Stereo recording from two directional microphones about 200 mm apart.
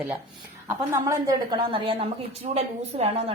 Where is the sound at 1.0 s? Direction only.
20° right (ahead or behind).